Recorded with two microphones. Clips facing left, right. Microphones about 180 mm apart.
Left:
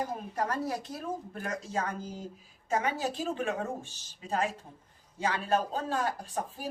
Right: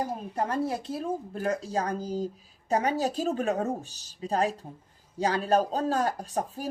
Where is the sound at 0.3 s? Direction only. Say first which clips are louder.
Right 4 dB; 25° right (ahead or behind).